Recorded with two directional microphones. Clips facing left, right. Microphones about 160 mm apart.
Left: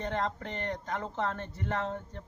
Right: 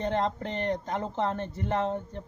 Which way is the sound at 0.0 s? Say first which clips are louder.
Right 5 dB; 25° right (ahead or behind).